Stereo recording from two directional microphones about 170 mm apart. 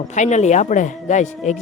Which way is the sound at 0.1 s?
45° left (ahead or behind).